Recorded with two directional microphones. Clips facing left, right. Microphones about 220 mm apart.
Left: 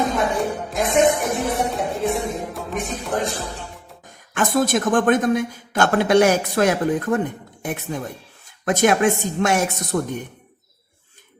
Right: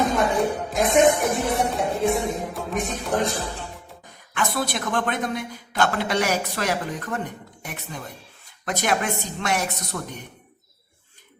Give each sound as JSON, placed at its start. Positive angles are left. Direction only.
{"t": 0.3, "sound": "music", "side_deg": 0}
{"t": 4.4, "sound": "a man's voice", "side_deg": 45}